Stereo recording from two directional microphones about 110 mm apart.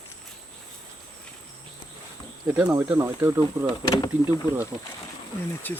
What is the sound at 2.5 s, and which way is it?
Speech, 30° right (ahead or behind).